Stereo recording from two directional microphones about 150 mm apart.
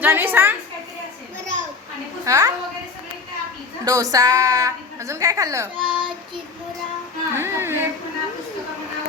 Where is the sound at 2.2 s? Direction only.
20° right (ahead or behind).